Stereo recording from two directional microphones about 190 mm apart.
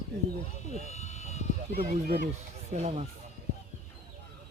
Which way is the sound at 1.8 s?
35° right (ahead or behind).